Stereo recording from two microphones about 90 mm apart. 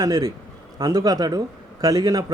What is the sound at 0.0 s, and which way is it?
Speech, 40° right (ahead or behind).